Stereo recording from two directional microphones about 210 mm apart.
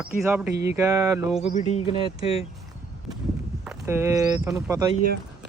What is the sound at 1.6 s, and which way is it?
Speech, 30° left (ahead or behind).